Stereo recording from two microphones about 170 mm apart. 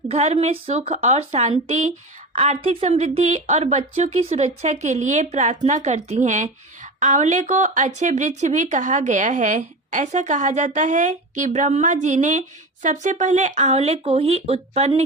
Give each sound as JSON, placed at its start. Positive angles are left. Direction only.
{"t": 0.1, "sound": "a woman's voice", "side_deg": -40}